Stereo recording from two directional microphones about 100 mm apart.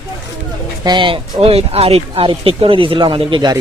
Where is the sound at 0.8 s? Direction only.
55° right (ahead or behind); by 2.3 s 80° right.